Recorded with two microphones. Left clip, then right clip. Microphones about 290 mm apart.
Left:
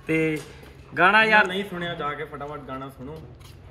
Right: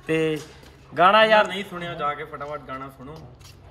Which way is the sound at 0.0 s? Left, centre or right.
Right.